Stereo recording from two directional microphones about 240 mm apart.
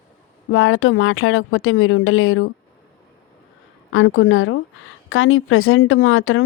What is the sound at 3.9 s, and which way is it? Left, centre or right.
Speech, left.